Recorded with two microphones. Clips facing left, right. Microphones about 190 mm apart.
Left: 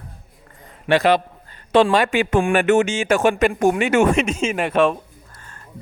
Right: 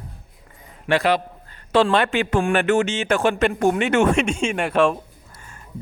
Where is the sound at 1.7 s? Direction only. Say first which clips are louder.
Left 2 dB; 15° left (ahead or behind).